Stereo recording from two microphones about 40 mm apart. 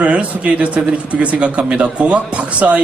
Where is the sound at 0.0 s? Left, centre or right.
Right.